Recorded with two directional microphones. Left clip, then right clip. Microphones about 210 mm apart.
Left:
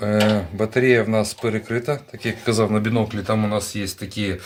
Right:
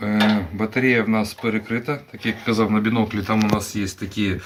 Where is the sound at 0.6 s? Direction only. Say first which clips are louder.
Left 2 dB; 65° left (ahead or behind).